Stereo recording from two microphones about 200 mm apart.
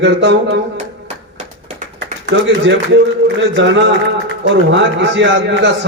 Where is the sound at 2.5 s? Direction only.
60° right (ahead or behind).